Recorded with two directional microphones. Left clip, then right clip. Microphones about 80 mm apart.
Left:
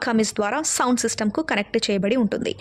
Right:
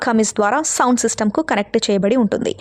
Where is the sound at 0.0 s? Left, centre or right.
Right.